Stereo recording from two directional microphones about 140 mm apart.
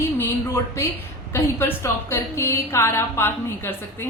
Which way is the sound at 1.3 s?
15° left (ahead or behind).